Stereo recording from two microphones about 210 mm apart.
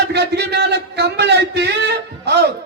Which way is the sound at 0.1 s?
55° right (ahead or behind).